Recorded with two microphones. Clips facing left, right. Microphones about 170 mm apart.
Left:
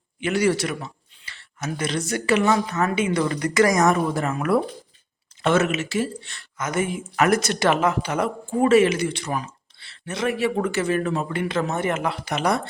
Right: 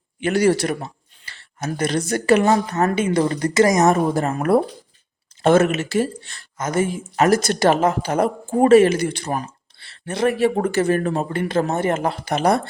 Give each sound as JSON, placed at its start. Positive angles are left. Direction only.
{"t": 0.2, "sound": "speech", "side_deg": -40}